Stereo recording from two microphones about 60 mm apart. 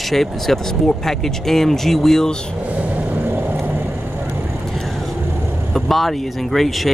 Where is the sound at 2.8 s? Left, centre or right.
Right.